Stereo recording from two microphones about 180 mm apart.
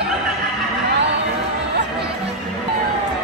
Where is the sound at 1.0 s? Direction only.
75° right (ahead or behind).